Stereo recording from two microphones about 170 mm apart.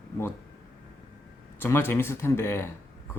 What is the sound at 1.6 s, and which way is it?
Speech, 15° left (ahead or behind).